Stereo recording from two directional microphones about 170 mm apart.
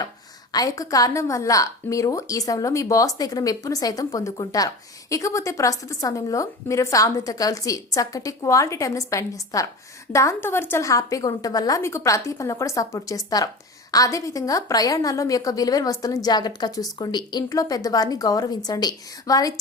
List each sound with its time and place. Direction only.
0.5 s a woman's voice: 20° left (ahead or behind)